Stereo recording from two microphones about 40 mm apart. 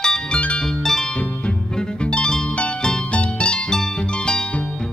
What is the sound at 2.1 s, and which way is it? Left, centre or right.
Music, left.